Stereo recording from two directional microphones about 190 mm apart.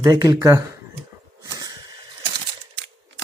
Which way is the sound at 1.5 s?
20° right (ahead or behind).